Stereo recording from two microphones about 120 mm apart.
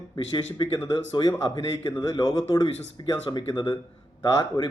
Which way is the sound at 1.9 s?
35° left (ahead or behind).